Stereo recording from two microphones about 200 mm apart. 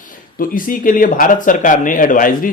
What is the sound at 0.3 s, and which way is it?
Speech, 45° left (ahead or behind).